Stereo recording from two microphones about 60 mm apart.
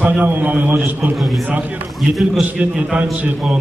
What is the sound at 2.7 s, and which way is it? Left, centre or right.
Speech, centre.